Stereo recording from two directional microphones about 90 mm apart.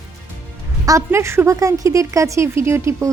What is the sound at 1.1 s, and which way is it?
A woman's voice, 30° right (ahead or behind).